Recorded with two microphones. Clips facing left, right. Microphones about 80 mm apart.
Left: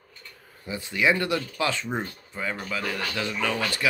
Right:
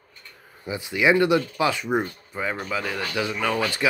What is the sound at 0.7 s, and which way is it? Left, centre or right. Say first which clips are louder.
Speech: right 3 dB; centre.